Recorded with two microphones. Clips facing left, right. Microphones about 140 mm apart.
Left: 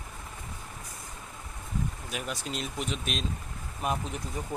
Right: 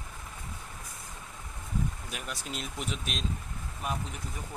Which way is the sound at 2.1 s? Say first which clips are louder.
Left 4 dB; centre (ahead or behind).